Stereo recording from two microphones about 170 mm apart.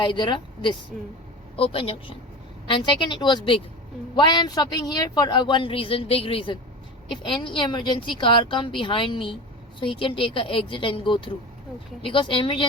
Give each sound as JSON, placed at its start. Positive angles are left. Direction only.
{"t": 0.0, "sound": "a woman's voice", "side_deg": 30}